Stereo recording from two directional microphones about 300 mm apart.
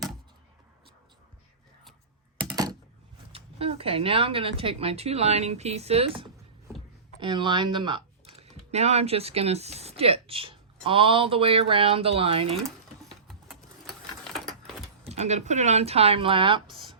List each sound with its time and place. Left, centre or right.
2.4 s a sound: centre
3.3 s speech: centre
12.5 s sewing machine: centre
15.0 s speech: right